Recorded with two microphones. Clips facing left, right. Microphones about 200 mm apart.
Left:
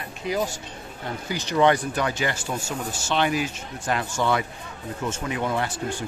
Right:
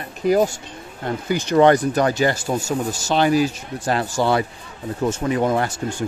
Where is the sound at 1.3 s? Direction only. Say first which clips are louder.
Right 6 dB; 50° right (ahead or behind).